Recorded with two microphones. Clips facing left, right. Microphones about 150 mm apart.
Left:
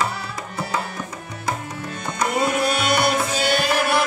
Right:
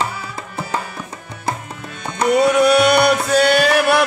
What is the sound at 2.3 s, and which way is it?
Music, 70° right (ahead or behind).